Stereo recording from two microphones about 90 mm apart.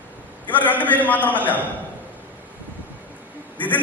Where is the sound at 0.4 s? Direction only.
20° left (ahead or behind).